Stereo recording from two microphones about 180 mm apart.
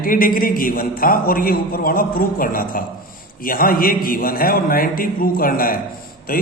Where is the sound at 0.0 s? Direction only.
50° left (ahead or behind).